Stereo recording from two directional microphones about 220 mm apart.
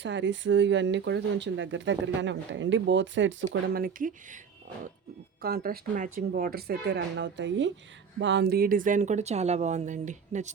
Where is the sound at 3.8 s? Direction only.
35° right (ahead or behind).